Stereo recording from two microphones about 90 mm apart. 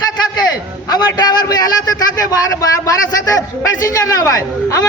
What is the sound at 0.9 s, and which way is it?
A man's voice, 50° left (ahead or behind).